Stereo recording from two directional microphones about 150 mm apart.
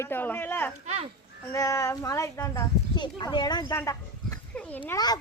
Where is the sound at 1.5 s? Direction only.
20° left (ahead or behind).